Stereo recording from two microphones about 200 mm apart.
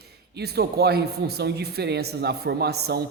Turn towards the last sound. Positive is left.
turn(degrees=-55)  # may be behind; listen again after turning